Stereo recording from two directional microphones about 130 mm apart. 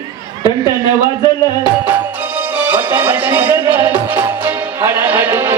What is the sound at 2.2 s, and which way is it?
Music, 15° right (ahead or behind).